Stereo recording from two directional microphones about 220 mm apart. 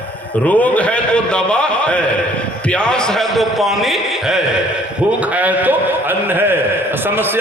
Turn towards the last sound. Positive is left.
turn(degrees=-10)  # may be behind; listen again after turning